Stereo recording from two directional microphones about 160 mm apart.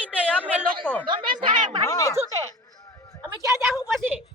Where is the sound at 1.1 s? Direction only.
30° right (ahead or behind).